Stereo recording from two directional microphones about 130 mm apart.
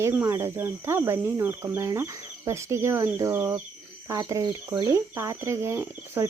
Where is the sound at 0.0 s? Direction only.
20° right (ahead or behind).